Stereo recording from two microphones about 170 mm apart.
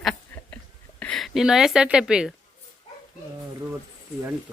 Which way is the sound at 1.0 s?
5° left (ahead or behind).